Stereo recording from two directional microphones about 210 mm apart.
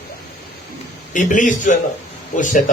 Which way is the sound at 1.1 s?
35° left (ahead or behind).